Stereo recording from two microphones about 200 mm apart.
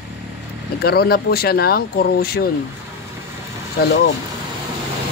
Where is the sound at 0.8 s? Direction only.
50° left (ahead or behind).